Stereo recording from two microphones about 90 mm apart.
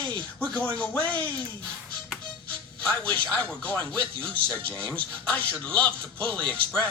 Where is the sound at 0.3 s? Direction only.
15° left (ahead or behind).